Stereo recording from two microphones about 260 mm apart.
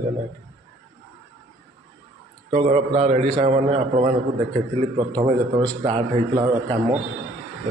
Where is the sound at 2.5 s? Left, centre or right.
Right.